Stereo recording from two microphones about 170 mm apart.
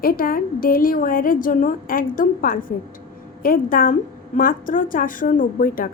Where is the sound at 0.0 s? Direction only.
60° left (ahead or behind).